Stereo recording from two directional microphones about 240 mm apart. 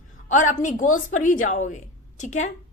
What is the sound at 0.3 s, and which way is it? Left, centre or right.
A woman's voice, left.